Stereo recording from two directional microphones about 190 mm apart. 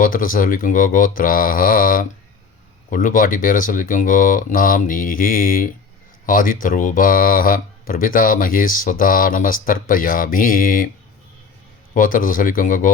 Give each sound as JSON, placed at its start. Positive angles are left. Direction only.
{"t": 0.0, "sound": "speech", "side_deg": 45}
{"t": 11.9, "sound": "speech", "side_deg": 45}